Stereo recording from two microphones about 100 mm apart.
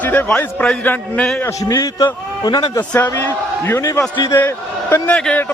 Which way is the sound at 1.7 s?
40° left (ahead or behind).